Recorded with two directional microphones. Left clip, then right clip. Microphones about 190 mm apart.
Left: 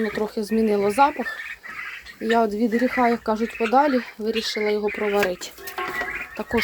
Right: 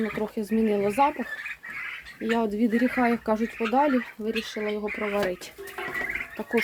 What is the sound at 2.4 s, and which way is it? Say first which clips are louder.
Speech: left 3 dB; 5° left (ahead or behind).